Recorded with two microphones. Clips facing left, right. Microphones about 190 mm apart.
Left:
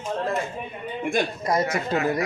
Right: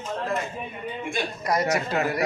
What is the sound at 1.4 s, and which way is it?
Speech, 25° left (ahead or behind).